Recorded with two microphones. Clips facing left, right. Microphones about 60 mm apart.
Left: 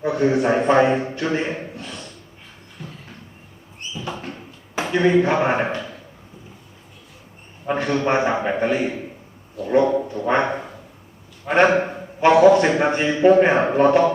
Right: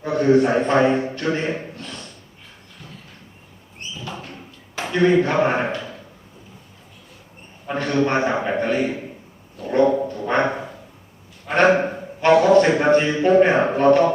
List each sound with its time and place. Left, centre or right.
0.0 s a man's voice: centre
4.7 s speech: centre
7.7 s a man's voice: centre
9.6 s a sound: centre
11.5 s a man's voice: centre